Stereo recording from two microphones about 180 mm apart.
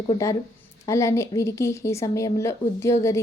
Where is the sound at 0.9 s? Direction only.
15° left (ahead or behind).